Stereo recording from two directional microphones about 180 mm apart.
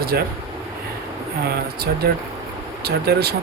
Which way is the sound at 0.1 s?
60° right (ahead or behind).